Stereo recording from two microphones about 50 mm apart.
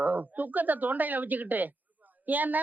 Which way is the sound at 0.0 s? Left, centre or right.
Right.